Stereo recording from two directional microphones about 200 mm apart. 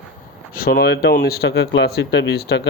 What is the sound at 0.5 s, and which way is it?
Speech, 50° left (ahead or behind).